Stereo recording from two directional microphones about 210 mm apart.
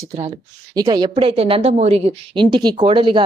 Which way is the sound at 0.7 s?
20° right (ahead or behind).